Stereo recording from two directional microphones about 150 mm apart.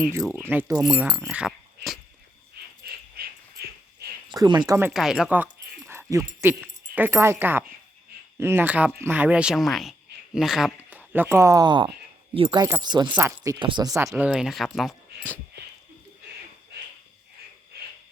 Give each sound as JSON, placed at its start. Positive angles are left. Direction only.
{"t": 0.3, "sound": "speech", "side_deg": -15}
{"t": 1.3, "sound": "keys jangling", "side_deg": -5}
{"t": 2.8, "sound": "dog", "side_deg": -90}
{"t": 4.3, "sound": "speech", "side_deg": -30}
{"t": 4.9, "sound": "a sound", "side_deg": 0}
{"t": 6.4, "sound": "speech", "side_deg": -10}
{"t": 13.1, "sound": "speech", "side_deg": -10}
{"t": 13.4, "sound": "speech", "side_deg": -20}
{"t": 14.1, "sound": "speech", "side_deg": -5}